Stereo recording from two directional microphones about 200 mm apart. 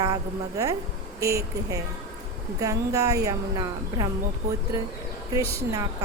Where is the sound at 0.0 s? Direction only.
15° right (ahead or behind).